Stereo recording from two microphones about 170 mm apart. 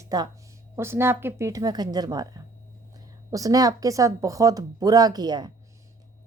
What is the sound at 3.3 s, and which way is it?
Speech, 20° right (ahead or behind).